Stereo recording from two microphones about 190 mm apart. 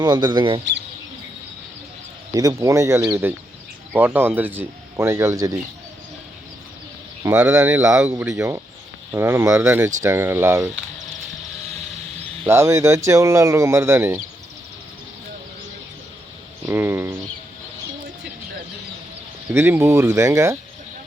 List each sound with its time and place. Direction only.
0.0 s speech: 20° right (ahead or behind)
2.3 s speech: 20° right (ahead or behind)
7.3 s speech: 5° right (ahead or behind)
12.5 s speech: 15° right (ahead or behind)
16.6 s a sound: 10° right (ahead or behind)
19.5 s speech: 10° right (ahead or behind)